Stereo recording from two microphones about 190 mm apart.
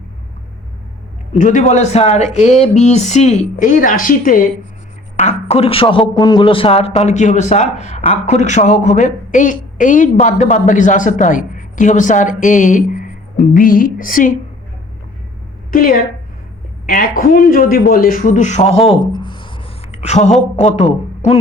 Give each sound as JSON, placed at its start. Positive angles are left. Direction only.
{"t": 1.4, "sound": "a man's voice", "side_deg": 40}
{"t": 5.1, "sound": "a man's voice", "side_deg": 35}
{"t": 15.7, "sound": "a woman's voice", "side_deg": 50}
{"t": 19.1, "sound": "a sound", "side_deg": 25}
{"t": 20.6, "sound": "speech", "side_deg": 35}